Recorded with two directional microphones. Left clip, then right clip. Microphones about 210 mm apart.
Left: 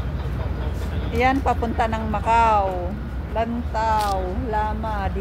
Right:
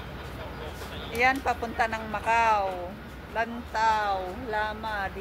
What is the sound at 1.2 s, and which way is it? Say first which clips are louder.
Speech: left 4 dB; 20° left (ahead or behind).